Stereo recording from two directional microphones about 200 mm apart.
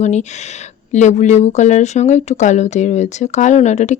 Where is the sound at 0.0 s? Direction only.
35° left (ahead or behind).